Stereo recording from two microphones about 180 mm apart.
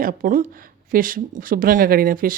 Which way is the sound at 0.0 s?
50° right (ahead or behind).